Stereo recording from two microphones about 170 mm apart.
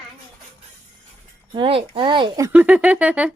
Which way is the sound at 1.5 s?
30° right (ahead or behind).